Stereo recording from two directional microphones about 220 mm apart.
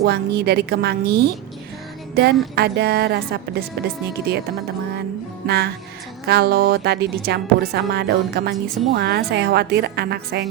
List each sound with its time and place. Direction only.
0.0 s a woman's voice: 50° right (ahead or behind)
5.5 s a woman's voice: 45° right (ahead or behind)